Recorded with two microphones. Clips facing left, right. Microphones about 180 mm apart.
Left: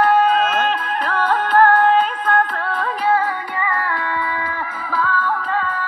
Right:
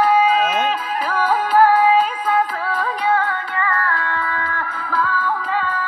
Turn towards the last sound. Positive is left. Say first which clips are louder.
# even
turn(degrees=0)  # may be behind; listen again after turning